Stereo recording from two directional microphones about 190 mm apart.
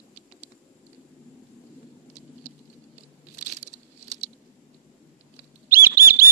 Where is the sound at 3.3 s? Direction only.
35° right (ahead or behind).